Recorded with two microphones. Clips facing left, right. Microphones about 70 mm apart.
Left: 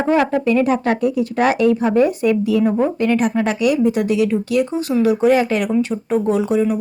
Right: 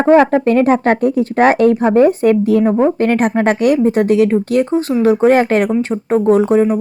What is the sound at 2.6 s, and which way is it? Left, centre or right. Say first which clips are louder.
Speech: right 4 dB; right.